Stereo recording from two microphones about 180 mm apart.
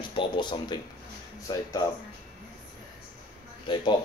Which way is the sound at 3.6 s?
25° left (ahead or behind).